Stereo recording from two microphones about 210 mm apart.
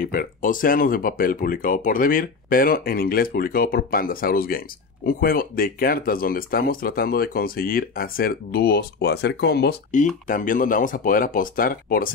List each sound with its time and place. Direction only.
0.0 s speech: 45° left (ahead or behind)